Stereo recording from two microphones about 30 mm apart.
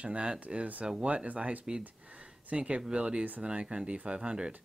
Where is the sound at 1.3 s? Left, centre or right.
Right.